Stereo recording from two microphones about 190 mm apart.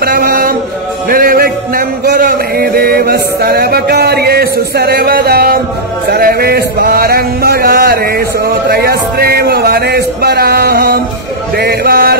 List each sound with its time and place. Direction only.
0.0 s chant: 55° right (ahead or behind)
1.0 s music: 50° right (ahead or behind)
6.0 s a sound: 55° right (ahead or behind)
11.5 s music: 55° right (ahead or behind)